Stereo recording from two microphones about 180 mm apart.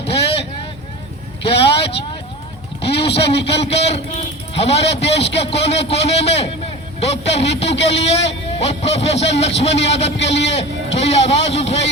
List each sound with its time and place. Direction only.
1.5 s vehicle: 30° left (ahead or behind)
3.0 s a man's voice: 30° left (ahead or behind)